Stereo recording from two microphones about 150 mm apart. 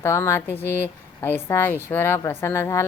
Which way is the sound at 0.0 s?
15° left (ahead or behind).